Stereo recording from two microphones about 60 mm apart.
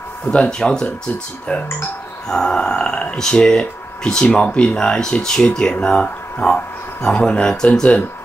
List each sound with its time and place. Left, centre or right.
0.3 s speech: centre
1.5 s speech: left
2.2 s speech: centre